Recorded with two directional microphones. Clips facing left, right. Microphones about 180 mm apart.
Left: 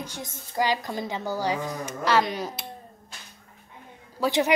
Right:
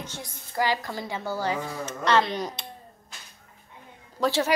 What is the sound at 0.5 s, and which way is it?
A child's voice, 15° left (ahead or behind).